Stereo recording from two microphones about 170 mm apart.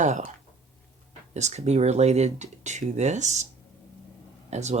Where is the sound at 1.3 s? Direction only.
40° right (ahead or behind).